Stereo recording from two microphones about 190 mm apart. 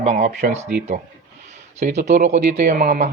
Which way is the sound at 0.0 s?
35° right (ahead or behind).